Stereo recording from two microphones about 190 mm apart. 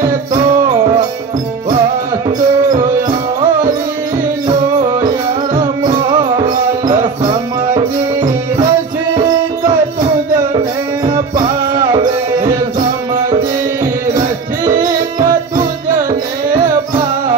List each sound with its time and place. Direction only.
0.7 s music: 20° right (ahead or behind)
2.2 s music: 20° right (ahead or behind)
4.5 s music: 20° right (ahead or behind)
11.1 s music: 35° right (ahead or behind)
11.9 s music: 20° right (ahead or behind)
15.1 s music: 20° right (ahead or behind)